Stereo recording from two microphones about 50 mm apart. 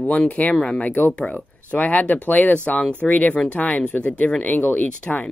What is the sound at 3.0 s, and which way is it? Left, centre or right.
Speech, left.